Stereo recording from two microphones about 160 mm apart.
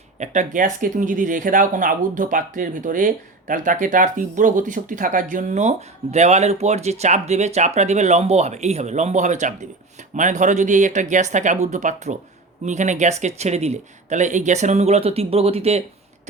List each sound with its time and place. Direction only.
0.2 s speech: 50° right (ahead or behind)